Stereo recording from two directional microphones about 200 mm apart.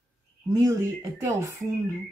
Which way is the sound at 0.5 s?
15° right (ahead or behind).